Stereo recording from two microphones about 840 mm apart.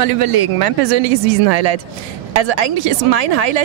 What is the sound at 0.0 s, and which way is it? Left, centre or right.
Speech, right.